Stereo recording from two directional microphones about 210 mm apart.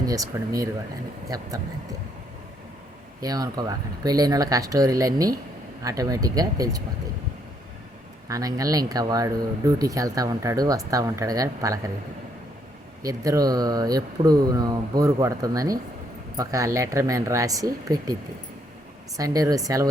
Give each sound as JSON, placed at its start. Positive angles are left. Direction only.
{"t": 0.0, "sound": "speech", "side_deg": -15}
{"t": 3.2, "sound": "speech", "side_deg": -15}
{"t": 8.3, "sound": "speech", "side_deg": -15}
{"t": 13.0, "sound": "speech", "side_deg": -15}